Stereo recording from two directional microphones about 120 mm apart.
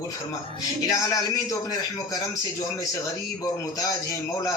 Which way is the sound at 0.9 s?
30° left (ahead or behind).